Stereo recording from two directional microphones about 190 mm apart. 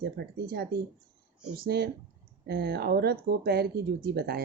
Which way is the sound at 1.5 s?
55° right (ahead or behind).